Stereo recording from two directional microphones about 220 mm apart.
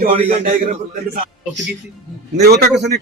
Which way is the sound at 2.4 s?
45° right (ahead or behind).